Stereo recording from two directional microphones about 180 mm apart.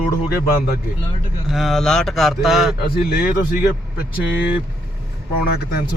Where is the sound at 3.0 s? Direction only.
55° left (ahead or behind).